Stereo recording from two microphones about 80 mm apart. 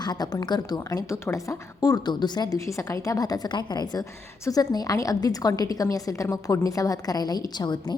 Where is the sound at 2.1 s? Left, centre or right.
Left.